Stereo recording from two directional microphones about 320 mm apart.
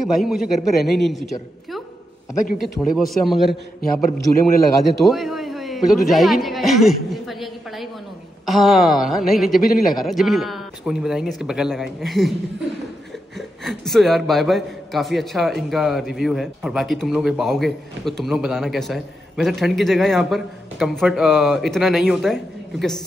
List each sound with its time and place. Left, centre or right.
0.1 s a man's voice: centre
2.6 s a man's voice: centre
4.0 s a man's voice: left
5.0 s a man's voice: centre
13.4 s a man's voice: centre